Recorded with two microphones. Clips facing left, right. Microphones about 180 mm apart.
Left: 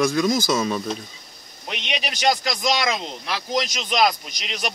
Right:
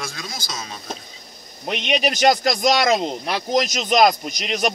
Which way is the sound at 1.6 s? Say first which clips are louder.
Right 8 dB; 50° right (ahead or behind).